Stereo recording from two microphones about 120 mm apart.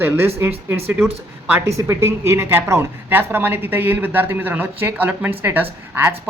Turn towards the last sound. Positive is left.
turn(degrees=-15)  # may be behind; listen again after turning